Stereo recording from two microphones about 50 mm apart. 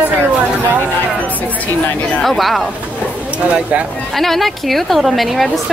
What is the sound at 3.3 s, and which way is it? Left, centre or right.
Speech, right.